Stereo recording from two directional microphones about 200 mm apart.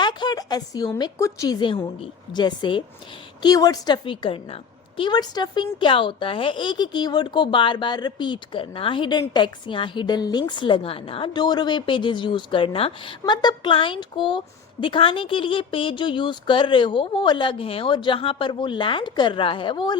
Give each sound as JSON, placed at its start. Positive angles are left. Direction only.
{"t": 0.0, "sound": "a woman's voice", "side_deg": 20}